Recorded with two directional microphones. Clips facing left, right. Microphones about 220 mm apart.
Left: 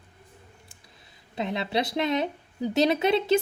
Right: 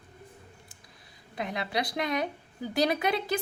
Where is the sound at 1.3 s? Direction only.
25° left (ahead or behind).